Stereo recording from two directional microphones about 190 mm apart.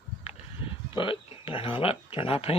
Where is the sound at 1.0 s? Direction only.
30° left (ahead or behind).